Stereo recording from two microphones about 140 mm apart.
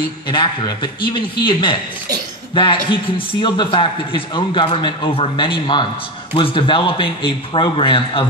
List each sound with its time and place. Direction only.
0.3 s a man's voice: 35° left (ahead or behind)